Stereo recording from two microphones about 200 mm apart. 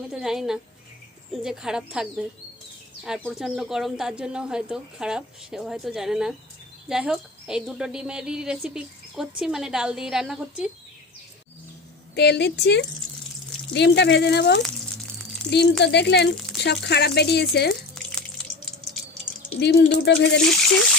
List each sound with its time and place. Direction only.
0.1 s speech: centre (ahead or behind)
12.1 s speech: 55° left (ahead or behind)
18.0 s drip: 5° left (ahead or behind)
19.5 s speech: 60° left (ahead or behind)